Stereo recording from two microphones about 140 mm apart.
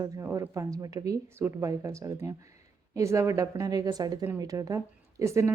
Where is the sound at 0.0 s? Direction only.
20° right (ahead or behind).